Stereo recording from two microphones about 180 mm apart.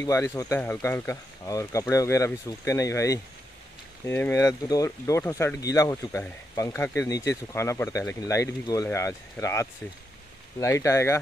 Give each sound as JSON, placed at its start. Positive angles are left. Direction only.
{"t": 0.0, "sound": "speech", "side_deg": 15}